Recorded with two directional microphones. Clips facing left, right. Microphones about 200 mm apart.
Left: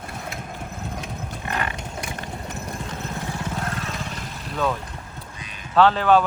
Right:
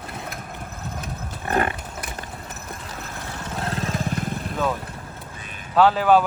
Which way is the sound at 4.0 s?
50° right (ahead or behind).